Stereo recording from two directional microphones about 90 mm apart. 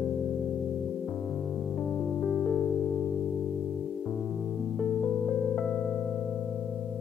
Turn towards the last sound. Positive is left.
turn(degrees=15)  # may be behind; listen again after turning